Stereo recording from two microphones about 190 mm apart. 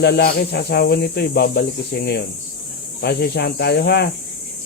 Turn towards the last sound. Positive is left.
turn(degrees=60)  # may be behind; listen again after turning